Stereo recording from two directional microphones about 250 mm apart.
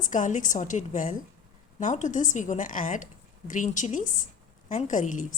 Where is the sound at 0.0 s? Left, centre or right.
Left.